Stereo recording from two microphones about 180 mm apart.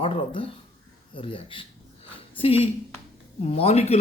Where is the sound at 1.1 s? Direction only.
30° left (ahead or behind).